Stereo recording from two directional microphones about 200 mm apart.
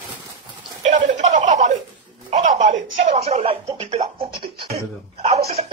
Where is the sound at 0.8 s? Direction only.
40° right (ahead or behind).